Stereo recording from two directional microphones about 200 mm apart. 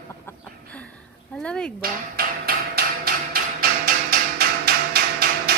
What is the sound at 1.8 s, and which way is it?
Hammer, 50° right (ahead or behind).